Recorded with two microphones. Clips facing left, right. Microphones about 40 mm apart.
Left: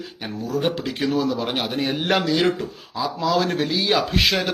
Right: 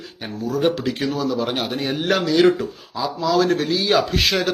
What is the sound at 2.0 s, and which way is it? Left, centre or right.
Speech, left.